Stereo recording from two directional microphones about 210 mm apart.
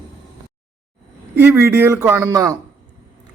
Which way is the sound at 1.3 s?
10° right (ahead or behind).